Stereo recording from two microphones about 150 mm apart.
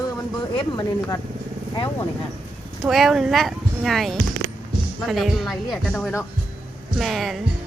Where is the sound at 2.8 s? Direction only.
Centre (ahead or behind).